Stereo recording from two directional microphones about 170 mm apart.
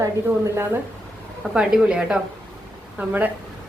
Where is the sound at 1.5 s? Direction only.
5° right (ahead or behind).